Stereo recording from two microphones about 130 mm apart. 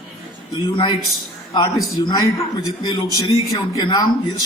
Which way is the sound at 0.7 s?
35° left (ahead or behind).